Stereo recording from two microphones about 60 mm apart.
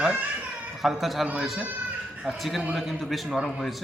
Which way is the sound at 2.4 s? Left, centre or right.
Centre.